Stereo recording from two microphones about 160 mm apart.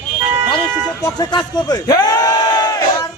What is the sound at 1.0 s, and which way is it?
Speech, 25° left (ahead or behind).